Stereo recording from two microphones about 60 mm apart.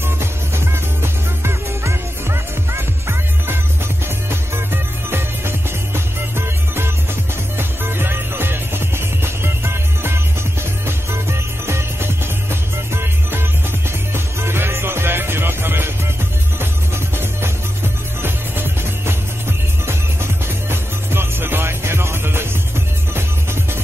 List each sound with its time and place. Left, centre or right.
1.0 s music: right
5.9 s music: right
18.2 s music: right
20.7 s music: right